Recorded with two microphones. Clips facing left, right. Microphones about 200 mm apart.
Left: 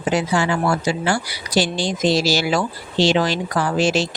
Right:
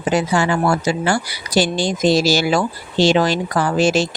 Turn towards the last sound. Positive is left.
turn(degrees=-45)  # may be behind; listen again after turning